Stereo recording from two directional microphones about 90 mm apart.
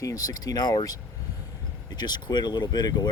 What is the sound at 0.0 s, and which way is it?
Speech, 40° left (ahead or behind).